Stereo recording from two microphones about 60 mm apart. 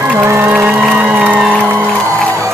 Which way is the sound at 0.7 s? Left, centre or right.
Centre.